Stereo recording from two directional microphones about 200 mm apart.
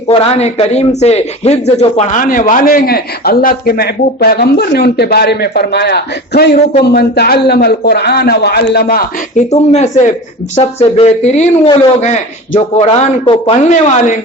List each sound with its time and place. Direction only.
0.1 s speech: 30° left (ahead or behind); by 9.0 s 50° left (ahead or behind)
9.5 s speech: 35° left (ahead or behind)